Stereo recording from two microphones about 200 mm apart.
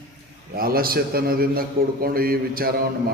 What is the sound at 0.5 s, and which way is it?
Speech, 45° right (ahead or behind).